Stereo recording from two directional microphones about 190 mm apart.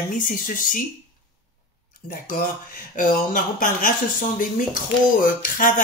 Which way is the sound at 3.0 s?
45° left (ahead or behind).